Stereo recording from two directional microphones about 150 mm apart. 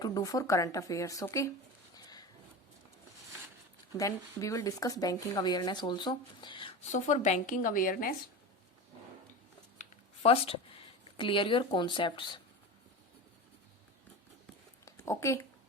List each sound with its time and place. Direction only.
0.0 s speech: 25° left (ahead or behind)
3.9 s speech: 25° left (ahead or behind)
6.9 s speech: 50° left (ahead or behind); by 8.1 s 70° left (ahead or behind)
10.2 s speech: 40° left (ahead or behind)
14.8 s a sound: 20° left (ahead or behind)